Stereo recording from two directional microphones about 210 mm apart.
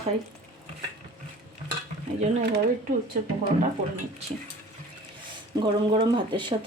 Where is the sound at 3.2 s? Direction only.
40° right (ahead or behind).